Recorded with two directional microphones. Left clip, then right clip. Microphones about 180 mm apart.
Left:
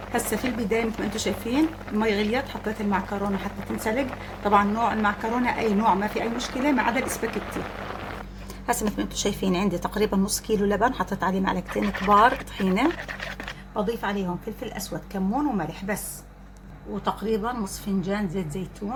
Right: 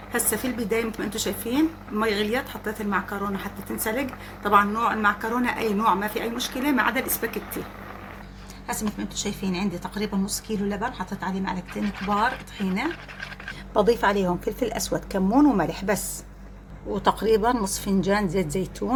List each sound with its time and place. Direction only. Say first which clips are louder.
0.1 s speech: even; 20° left (ahead or behind)
8.6 s a woman's voice: left 5 dB; 50° left (ahead or behind)
13.7 s speech: right 7 dB; 50° right (ahead or behind)
17.0 s speech: right 6 dB; 50° right (ahead or behind)